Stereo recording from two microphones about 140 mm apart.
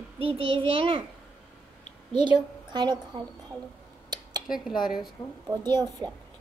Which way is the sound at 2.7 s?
30° right (ahead or behind).